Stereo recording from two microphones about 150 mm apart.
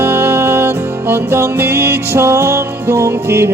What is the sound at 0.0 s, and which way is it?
Music, 15° right (ahead or behind).